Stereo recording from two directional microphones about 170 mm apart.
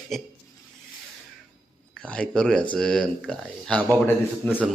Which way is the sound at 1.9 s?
5° left (ahead or behind).